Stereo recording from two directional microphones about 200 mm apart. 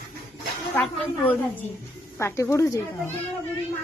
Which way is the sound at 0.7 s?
10° left (ahead or behind).